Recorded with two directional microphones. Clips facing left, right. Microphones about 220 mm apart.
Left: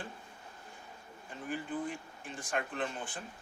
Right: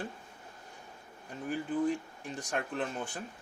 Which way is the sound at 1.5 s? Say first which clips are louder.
Right 6 dB; 40° right (ahead or behind).